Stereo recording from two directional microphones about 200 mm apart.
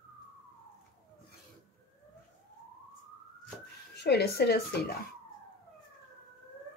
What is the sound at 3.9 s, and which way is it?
Speech, 55° left (ahead or behind).